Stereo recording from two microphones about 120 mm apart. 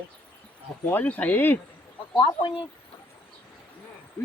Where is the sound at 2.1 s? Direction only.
45° left (ahead or behind).